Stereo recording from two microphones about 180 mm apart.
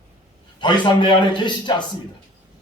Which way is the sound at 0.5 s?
25° left (ahead or behind).